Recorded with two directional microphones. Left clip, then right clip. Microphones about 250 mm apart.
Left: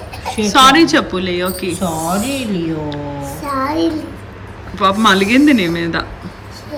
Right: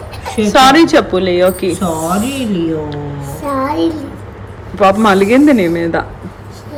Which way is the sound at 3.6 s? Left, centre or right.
Centre.